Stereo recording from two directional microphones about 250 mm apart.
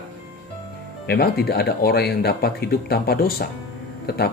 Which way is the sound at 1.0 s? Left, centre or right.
Left.